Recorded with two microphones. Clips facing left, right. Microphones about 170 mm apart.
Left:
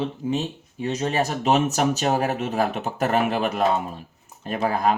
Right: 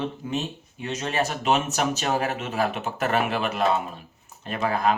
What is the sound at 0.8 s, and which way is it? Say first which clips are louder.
Speech: left 3 dB; 35° left (ahead or behind).